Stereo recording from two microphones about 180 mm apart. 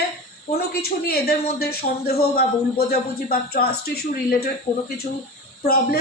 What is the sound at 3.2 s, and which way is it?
Speech, 55° left (ahead or behind).